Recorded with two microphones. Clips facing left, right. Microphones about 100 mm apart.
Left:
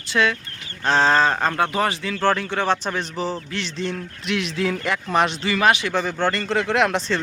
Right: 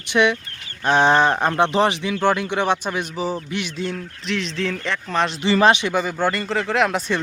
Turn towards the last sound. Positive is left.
turn(degrees=0)  # may be behind; listen again after turning